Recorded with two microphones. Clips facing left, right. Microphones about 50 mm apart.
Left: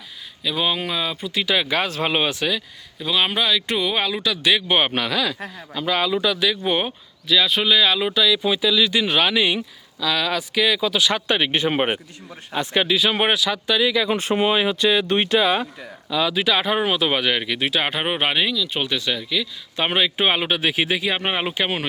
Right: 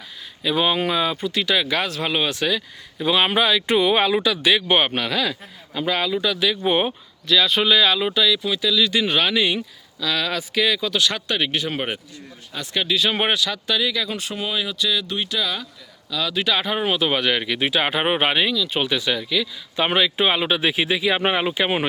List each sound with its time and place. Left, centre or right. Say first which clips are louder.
0.4 s speech: right 3 dB; centre
1.9 s speech: left 1 dB; left; by 2.6 s centre
3.0 s speech: right 3 dB; centre
7.3 s speech: right 1 dB; centre
8.4 s speech: left 2 dB; centre
11.5 s speech: left 4 dB; left
13.0 s speech: left 1 dB; centre
14.2 s speech: left 7 dB; left
16.0 s speech: left 4 dB; left
16.3 s speech: right 1 dB; centre